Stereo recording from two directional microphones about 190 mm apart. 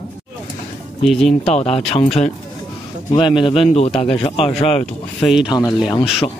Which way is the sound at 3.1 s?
25° left (ahead or behind).